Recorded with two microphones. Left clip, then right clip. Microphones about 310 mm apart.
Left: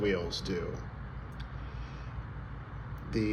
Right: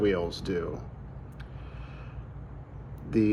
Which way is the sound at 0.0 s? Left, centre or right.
Centre.